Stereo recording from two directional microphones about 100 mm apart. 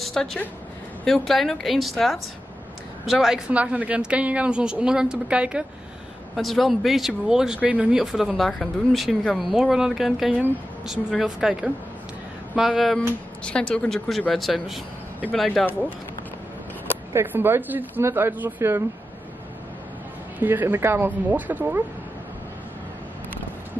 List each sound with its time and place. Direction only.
0.0 s a sound: 5° left (ahead or behind)
1.0 s a woman's voice: 5° left (ahead or behind)
6.3 s speech: centre (ahead or behind)
17.1 s speech: 20° right (ahead or behind)
20.3 s a woman's voice: 20° right (ahead or behind)